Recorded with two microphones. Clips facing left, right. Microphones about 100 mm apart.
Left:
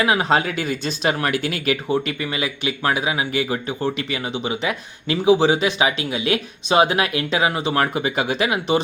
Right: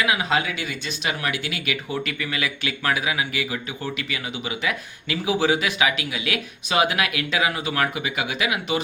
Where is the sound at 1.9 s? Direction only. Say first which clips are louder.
Left 5 dB; 25° left (ahead or behind).